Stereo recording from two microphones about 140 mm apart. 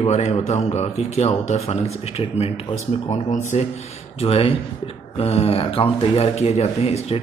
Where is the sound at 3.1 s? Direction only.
60° left (ahead or behind).